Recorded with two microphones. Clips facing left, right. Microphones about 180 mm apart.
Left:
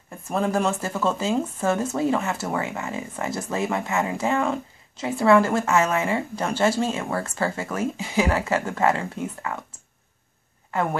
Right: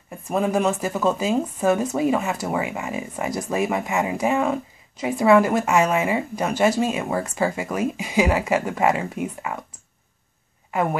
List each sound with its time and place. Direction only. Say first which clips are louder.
0.1 s speech: right 2 dB; 10° right (ahead or behind)
10.7 s speech: right 2 dB; 15° right (ahead or behind)